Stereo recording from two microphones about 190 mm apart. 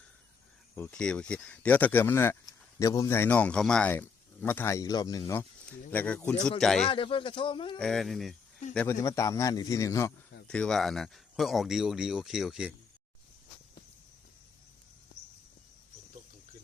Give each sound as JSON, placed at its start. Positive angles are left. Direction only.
{"t": 0.8, "sound": "a man's voice", "side_deg": 5}
{"t": 6.8, "sound": "speech", "side_deg": 30}
{"t": 7.8, "sound": "a man's voice", "side_deg": 0}
{"t": 10.4, "sound": "speech", "side_deg": 5}